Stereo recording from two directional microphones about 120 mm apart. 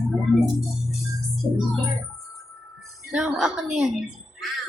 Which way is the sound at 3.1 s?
5° right (ahead or behind).